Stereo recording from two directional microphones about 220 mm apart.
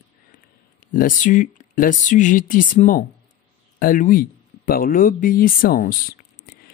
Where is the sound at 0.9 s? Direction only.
40° left (ahead or behind).